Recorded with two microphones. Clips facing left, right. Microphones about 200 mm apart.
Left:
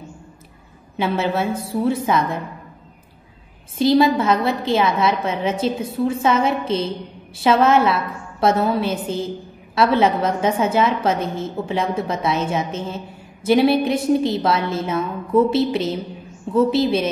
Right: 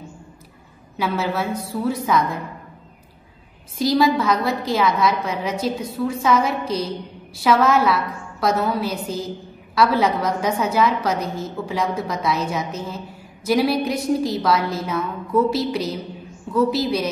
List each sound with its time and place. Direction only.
0.9 s a woman's voice: 25° left (ahead or behind)
3.7 s a woman's voice: 25° left (ahead or behind)